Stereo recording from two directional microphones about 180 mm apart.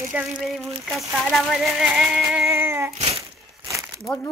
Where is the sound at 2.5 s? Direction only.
15° right (ahead or behind).